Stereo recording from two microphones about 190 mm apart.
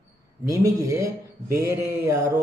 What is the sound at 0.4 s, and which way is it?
Speech, 15° right (ahead or behind).